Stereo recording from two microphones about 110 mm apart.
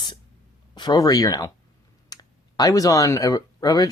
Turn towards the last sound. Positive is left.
turn(degrees=35)  # may be behind; listen again after turning